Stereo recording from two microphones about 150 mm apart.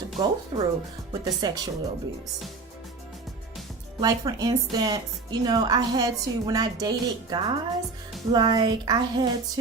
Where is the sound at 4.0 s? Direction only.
25° right (ahead or behind).